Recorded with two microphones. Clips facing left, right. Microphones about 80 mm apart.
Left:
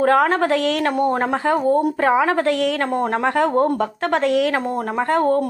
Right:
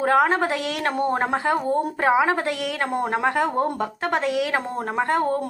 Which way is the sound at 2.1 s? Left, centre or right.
Centre.